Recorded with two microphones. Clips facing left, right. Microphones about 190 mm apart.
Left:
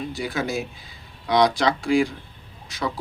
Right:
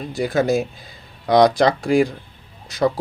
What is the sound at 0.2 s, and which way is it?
Speech, 45° right (ahead or behind).